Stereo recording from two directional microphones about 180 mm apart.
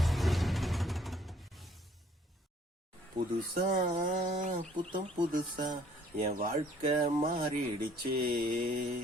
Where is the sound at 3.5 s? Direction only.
45° right (ahead or behind).